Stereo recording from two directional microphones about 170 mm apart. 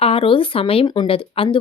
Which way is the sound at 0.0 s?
35° left (ahead or behind).